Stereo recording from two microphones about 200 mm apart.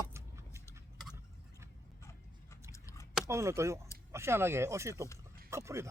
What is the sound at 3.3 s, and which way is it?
Speech, 15° right (ahead or behind).